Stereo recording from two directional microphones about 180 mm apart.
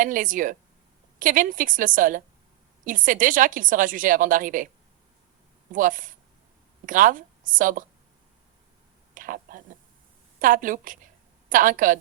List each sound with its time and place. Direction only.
0.0 s a woman's voice: 50° right (ahead or behind)
5.7 s a woman's voice: 50° right (ahead or behind)
9.1 s a sound: 50° right (ahead or behind)
10.4 s a woman's voice: 50° right (ahead or behind)